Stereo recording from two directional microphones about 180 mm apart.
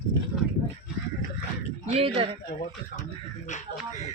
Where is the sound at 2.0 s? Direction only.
30° right (ahead or behind).